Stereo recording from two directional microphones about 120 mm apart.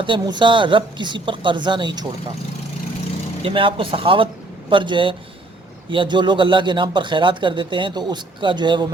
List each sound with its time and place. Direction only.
0.0 s speech: 40° right (ahead or behind)
3.4 s speech: 45° right (ahead or behind)